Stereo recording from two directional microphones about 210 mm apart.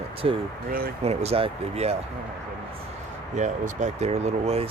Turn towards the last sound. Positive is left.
turn(degrees=-30)  # may be behind; listen again after turning